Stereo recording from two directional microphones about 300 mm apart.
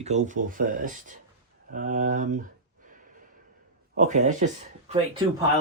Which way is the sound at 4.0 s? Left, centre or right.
Right.